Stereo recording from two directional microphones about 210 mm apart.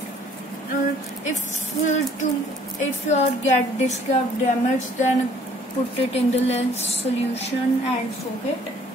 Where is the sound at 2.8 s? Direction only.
35° left (ahead or behind).